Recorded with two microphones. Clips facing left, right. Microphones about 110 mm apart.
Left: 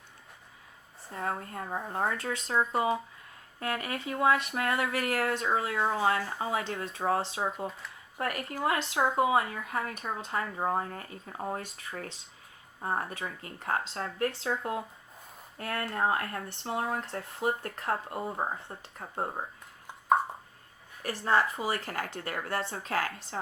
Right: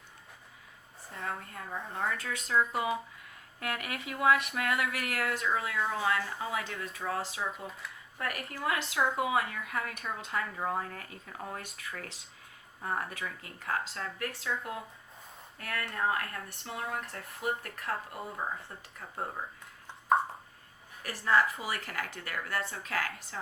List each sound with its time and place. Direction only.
1.1 s speech: 35° left (ahead or behind)
21.0 s speech: 30° left (ahead or behind)